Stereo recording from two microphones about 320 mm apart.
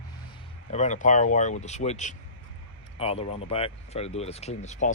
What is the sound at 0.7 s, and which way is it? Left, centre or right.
Speech, left.